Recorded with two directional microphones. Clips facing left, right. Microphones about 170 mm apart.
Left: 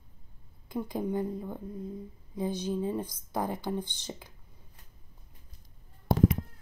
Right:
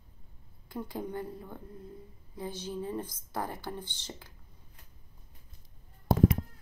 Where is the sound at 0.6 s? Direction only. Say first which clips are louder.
Left 5 dB; 15° left (ahead or behind).